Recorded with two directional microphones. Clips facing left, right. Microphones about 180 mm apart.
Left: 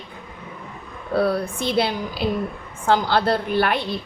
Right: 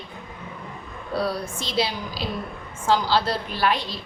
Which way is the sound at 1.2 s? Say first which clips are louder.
Left 6 dB; 55° left (ahead or behind).